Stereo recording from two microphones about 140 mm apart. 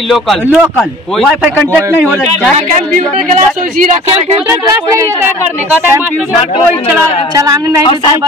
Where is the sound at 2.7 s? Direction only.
65° right (ahead or behind).